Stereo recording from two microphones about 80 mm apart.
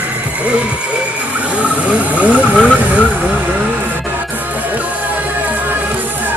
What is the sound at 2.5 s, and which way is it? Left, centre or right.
Speech, centre.